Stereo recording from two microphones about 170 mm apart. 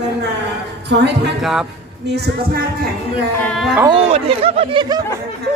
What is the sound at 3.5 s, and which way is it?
Speech, centre (ahead or behind).